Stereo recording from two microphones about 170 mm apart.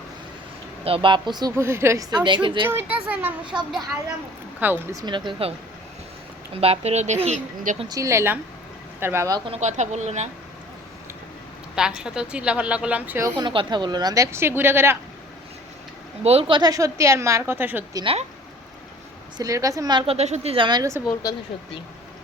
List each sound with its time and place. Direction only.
0.9 s speech: 30° right (ahead or behind)
2.6 s a woman's voice: 10° right (ahead or behind)
4.6 s speech: 15° right (ahead or behind); by 7.8 s 45° right (ahead or behind)
7.9 s a woman's voice: 20° right (ahead or behind)
9.5 s speech: 45° right (ahead or behind)
11.7 s a woman's voice: 5° right (ahead or behind)
13.4 s speech: 30° right (ahead or behind)
16.2 s a woman's voice: 35° right (ahead or behind); by 17.8 s 10° right (ahead or behind)
17.9 s speech: 35° right (ahead or behind)
19.4 s speech: 20° right (ahead or behind)
21.1 s speech: 25° left (ahead or behind)